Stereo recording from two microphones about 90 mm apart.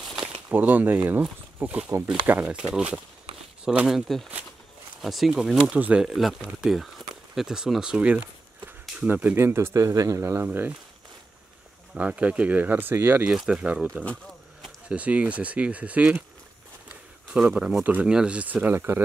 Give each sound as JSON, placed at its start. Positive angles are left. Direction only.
{"t": 0.0, "sound": "a sound", "side_deg": 0}
{"t": 0.5, "sound": "speech", "side_deg": -20}
{"t": 5.0, "sound": "speech", "side_deg": 0}
{"t": 6.0, "sound": "speech", "side_deg": 0}
{"t": 11.9, "sound": "speech", "side_deg": -15}
{"t": 13.2, "sound": "speech", "side_deg": -10}
{"t": 17.3, "sound": "speech", "side_deg": -10}